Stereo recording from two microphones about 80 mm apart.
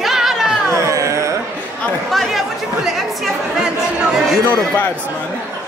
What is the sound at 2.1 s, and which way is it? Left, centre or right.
Chatter, centre.